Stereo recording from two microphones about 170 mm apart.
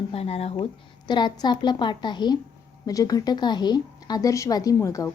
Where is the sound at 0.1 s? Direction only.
35° left (ahead or behind).